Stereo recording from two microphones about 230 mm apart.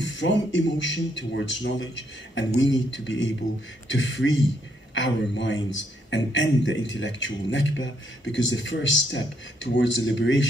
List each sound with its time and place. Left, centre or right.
0.0 s speech: left